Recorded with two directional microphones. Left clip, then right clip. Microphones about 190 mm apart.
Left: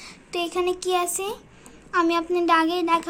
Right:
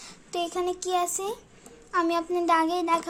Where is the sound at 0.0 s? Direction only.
30° right (ahead or behind).